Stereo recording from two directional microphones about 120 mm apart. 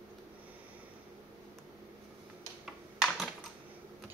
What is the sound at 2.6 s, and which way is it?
Typing, 5° right (ahead or behind).